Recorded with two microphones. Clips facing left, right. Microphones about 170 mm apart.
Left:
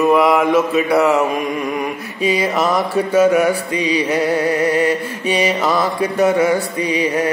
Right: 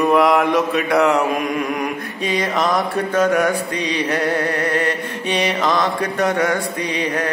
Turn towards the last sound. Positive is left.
turn(degrees=10)  # may be behind; listen again after turning